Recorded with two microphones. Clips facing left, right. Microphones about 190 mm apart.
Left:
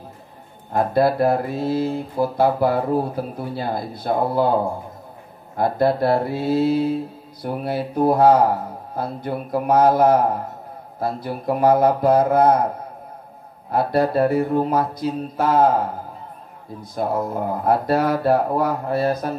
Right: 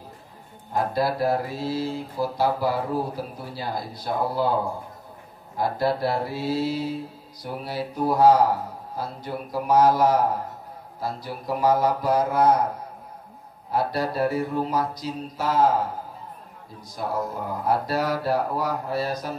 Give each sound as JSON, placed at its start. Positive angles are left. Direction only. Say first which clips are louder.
{"t": 0.7, "sound": "speech", "louder": "left 6 dB", "side_deg": 55}
{"t": 5.6, "sound": "speech", "louder": "left 5 dB", "side_deg": 55}
{"t": 13.7, "sound": "speech", "louder": "left 6 dB", "side_deg": 55}
{"t": 17.1, "sound": "speech", "louder": "left 4 dB", "side_deg": 55}